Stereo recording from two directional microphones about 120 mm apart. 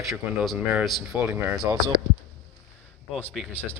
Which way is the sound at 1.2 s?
20° right (ahead or behind).